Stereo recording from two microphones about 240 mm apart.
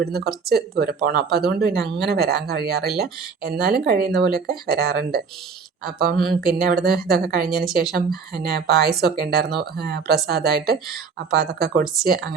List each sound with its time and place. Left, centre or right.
0.0 s speech: right
6.4 s speech: right